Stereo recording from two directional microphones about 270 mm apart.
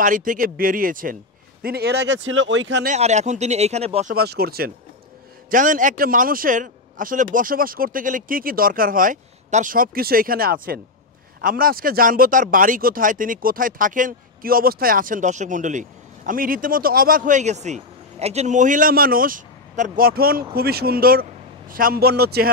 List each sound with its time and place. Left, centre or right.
0.0 s speech: right
2.9 s a man's voice: right
4.1 s a man's voice: right